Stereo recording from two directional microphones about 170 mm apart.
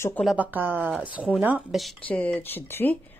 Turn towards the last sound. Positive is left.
turn(degrees=10)  # may be behind; listen again after turning